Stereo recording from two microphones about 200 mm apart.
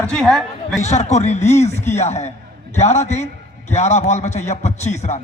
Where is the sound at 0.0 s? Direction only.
5° left (ahead or behind).